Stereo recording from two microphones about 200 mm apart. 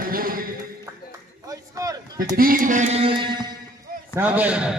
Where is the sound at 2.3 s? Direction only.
45° right (ahead or behind); by 3.5 s 25° right (ahead or behind).